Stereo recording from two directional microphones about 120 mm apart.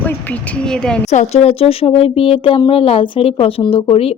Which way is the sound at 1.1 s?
75° left (ahead or behind).